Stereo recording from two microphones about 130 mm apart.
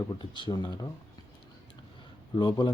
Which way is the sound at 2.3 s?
35° left (ahead or behind).